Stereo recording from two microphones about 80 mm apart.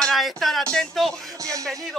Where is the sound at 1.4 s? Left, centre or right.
Right.